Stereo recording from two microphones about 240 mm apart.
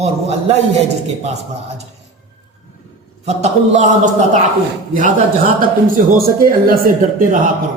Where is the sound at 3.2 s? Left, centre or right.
Right.